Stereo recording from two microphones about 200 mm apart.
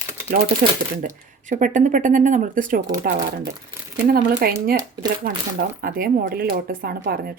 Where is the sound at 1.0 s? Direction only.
40° right (ahead or behind).